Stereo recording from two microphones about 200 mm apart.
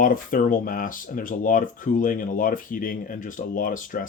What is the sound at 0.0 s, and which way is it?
Speech, 45° left (ahead or behind).